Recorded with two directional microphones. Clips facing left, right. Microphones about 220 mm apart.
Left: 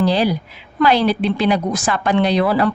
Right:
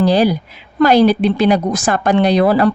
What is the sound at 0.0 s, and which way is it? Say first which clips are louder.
A woman's voice: right 4 dB; 45° right (ahead or behind).